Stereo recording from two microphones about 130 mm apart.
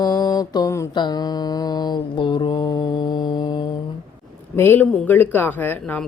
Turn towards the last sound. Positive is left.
turn(degrees=15)  # may be behind; listen again after turning